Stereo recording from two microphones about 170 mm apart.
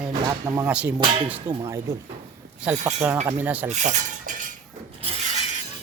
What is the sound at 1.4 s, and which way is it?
Speech, 20° right (ahead or behind).